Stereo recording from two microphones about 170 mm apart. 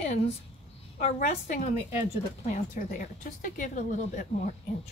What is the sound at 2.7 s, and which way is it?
Speech, 55° left (ahead or behind).